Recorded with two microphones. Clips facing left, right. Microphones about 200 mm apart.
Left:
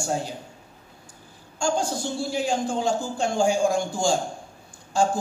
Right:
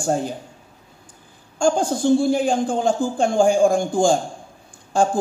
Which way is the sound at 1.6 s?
55° right (ahead or behind).